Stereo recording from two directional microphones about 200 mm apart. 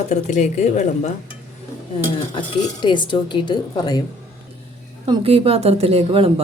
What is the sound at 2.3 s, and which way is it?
Speech, 25° left (ahead or behind).